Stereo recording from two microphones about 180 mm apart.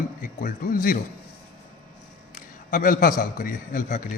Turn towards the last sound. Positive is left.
turn(degrees=45)  # may be behind; listen again after turning